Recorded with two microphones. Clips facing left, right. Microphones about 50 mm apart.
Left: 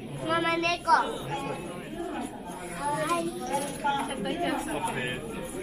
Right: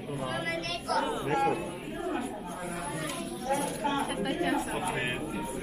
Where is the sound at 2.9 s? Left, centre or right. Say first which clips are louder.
Left 8 dB; left.